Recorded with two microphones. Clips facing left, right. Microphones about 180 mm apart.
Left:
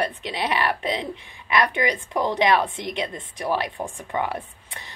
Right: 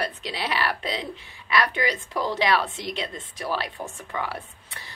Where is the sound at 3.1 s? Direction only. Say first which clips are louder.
Left 4 dB; 20° left (ahead or behind).